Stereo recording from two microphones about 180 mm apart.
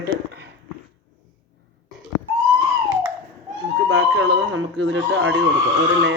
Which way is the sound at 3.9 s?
90° right.